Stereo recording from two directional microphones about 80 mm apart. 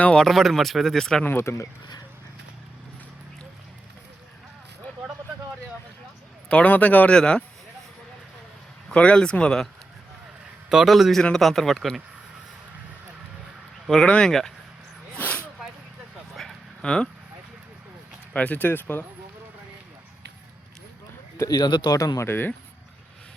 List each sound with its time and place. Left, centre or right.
0.0 s speech: centre
0.3 s speech: centre
1.2 s speech: left
6.5 s a man's voice: centre
8.9 s speech: centre
10.7 s speech: centre
13.8 s speech: centre
16.3 s a sound: centre
18.3 s a man's voice: centre
21.5 s a man's voice: left
21.9 s speech: left
22.3 s a man's voice: left